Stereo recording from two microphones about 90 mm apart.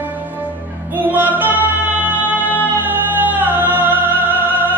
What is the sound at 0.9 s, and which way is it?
Music, 20° right (ahead or behind).